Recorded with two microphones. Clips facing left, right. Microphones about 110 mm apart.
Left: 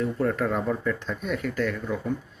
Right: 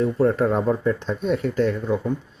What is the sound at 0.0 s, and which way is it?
Speech, 30° right (ahead or behind).